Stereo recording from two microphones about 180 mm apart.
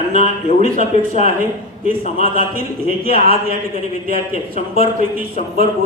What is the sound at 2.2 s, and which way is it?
Speech, 55° right (ahead or behind).